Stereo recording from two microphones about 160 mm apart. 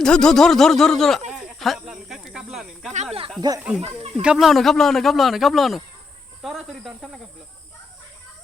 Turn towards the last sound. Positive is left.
turn(degrees=0)  # may be behind; listen again after turning